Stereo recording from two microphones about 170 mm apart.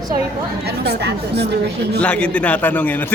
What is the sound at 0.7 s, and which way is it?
Speech, 75° right (ahead or behind).